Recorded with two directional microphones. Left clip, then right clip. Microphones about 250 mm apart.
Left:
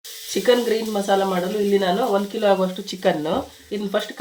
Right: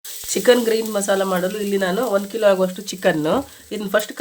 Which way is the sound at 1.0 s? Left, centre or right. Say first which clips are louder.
Left 2 dB; right.